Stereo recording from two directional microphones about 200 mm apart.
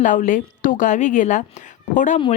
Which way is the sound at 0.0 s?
40° left (ahead or behind).